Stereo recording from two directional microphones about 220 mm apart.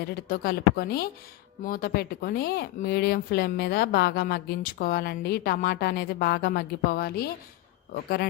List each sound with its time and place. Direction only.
0.0 s speech: 45° left (ahead or behind)